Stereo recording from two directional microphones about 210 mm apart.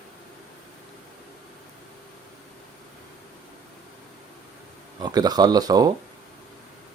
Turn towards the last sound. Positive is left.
turn(degrees=-20)  # may be behind; listen again after turning